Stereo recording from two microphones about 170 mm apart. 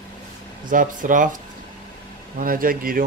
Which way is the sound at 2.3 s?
55° right (ahead or behind).